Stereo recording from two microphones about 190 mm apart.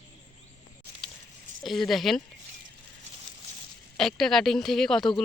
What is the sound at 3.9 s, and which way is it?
A woman's voice, centre (ahead or behind).